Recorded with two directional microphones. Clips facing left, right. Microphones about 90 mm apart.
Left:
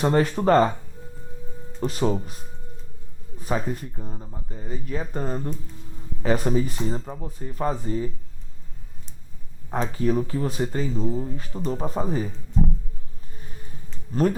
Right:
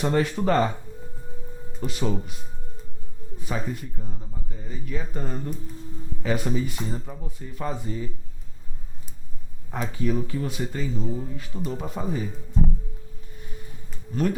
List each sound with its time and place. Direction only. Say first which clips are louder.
0.0 s speech: left 3 dB; 40° left (ahead or behind)
1.8 s speech: left 4 dB; 40° left (ahead or behind)
3.4 s speech: left 4 dB; 40° left (ahead or behind)
9.7 s speech: left 3 dB; 40° left (ahead or behind)